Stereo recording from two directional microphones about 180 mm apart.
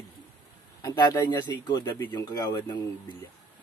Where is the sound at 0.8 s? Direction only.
25° left (ahead or behind).